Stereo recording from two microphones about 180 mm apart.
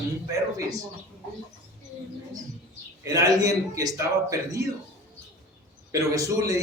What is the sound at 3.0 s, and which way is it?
Speech, 15° right (ahead or behind).